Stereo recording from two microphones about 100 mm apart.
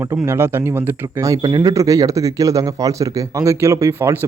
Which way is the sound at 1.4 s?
45° right (ahead or behind).